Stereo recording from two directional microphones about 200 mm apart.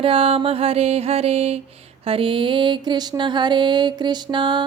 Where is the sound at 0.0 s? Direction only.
30° right (ahead or behind).